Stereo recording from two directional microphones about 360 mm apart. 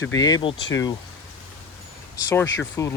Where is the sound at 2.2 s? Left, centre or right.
Centre.